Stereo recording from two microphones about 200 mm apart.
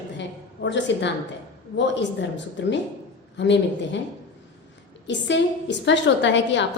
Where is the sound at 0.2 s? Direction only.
60° left (ahead or behind).